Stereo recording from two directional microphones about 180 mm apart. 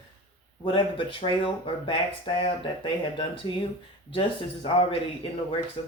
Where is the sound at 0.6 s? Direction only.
30° left (ahead or behind).